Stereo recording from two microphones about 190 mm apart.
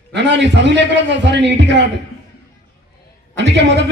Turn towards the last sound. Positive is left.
turn(degrees=-65)  # may be behind; listen again after turning